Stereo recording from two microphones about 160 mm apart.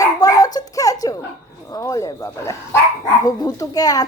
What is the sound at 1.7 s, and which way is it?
A woman's voice, 20° left (ahead or behind).